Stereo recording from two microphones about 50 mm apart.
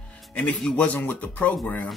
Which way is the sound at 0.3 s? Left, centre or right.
Left.